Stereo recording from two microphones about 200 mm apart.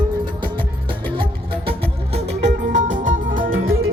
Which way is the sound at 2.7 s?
40° right (ahead or behind).